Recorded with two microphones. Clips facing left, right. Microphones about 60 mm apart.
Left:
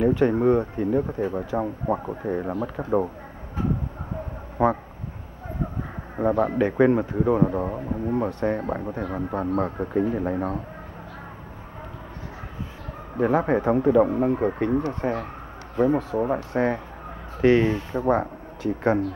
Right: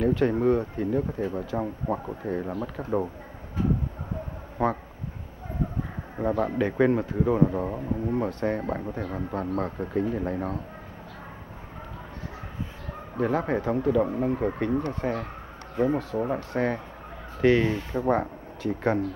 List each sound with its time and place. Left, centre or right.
0.0 s speech: centre
4.6 s speech: centre
6.1 s speech: centre
13.2 s speech: centre